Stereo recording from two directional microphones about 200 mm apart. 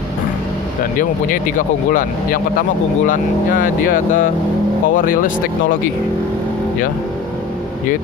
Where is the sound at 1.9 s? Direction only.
40° left (ahead or behind).